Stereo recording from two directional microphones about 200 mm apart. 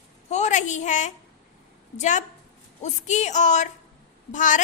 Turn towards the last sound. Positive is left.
turn(degrees=40)  # may be behind; listen again after turning